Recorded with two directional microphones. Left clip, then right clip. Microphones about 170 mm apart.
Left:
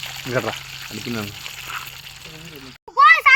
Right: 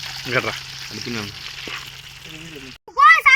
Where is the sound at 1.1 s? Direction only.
35° left (ahead or behind).